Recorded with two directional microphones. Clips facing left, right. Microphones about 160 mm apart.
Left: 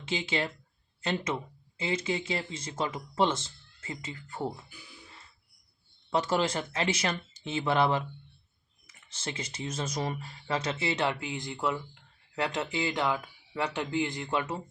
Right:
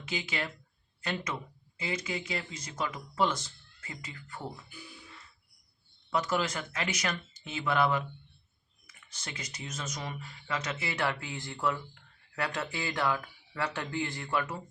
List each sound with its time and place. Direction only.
0.0 s speech: 25° left (ahead or behind)
6.1 s speech: 30° left (ahead or behind)